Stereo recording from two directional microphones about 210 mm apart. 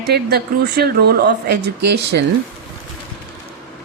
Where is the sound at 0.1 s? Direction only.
50° right (ahead or behind).